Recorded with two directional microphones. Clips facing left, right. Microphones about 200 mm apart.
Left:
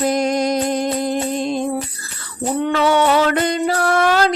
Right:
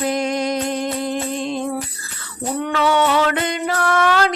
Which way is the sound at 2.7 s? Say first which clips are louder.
Left 1 dB; 40° left (ahead or behind).